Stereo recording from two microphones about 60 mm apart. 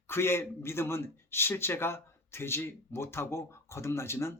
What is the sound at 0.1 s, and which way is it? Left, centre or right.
A man's voice, left.